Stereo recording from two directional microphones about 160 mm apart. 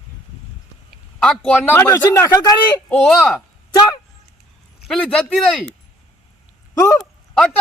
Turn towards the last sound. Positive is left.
turn(degrees=5)  # may be behind; listen again after turning